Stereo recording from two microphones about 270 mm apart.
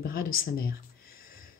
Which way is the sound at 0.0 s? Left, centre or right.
Left.